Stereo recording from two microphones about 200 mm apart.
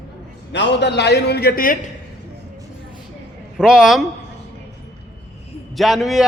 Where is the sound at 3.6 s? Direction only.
5° right (ahead or behind).